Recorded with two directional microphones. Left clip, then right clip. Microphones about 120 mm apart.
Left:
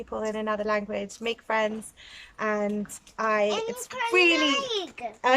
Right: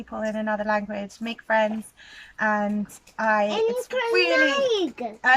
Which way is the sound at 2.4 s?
15° left (ahead or behind).